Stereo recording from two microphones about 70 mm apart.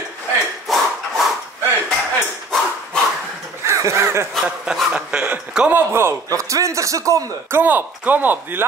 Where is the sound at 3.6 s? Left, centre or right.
Right.